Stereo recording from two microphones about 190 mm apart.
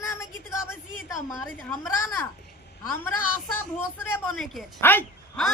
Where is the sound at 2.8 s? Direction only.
10° left (ahead or behind).